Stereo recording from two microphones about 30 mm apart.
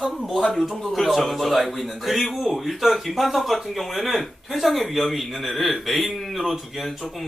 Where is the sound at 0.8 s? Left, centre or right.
Centre.